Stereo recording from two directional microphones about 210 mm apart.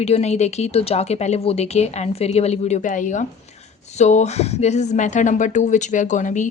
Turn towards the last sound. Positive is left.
turn(degrees=35)  # may be behind; listen again after turning